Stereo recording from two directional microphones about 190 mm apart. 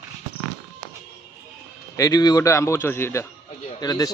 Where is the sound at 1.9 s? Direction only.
20° left (ahead or behind).